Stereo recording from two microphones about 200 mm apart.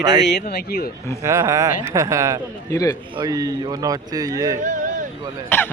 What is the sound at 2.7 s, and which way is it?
Speech, 15° left (ahead or behind).